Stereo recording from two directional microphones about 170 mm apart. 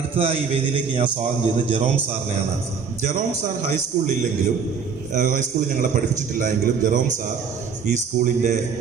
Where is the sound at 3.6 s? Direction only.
45° right (ahead or behind).